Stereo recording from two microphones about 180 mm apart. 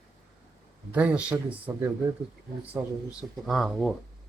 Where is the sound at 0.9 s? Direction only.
5° right (ahead or behind).